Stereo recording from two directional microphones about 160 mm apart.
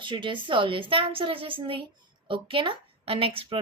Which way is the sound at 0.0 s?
30° right (ahead or behind).